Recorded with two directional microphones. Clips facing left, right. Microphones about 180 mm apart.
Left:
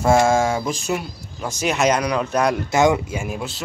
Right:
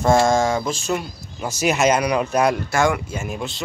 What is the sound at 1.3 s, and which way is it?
Speech, 5° right (ahead or behind).